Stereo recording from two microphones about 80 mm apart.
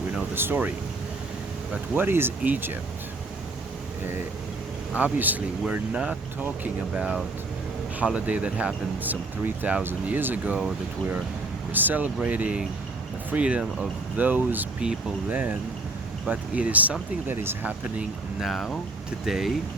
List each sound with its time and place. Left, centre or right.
0.3 s speech: right
1.7 s speech: right
4.9 s speech: centre
9.8 s speech: right
11.7 s speech: right
18.3 s speech: centre